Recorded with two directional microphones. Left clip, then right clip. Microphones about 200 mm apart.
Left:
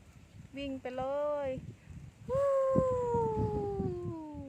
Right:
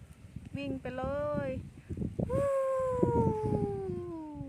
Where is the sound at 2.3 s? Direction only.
5° right (ahead or behind).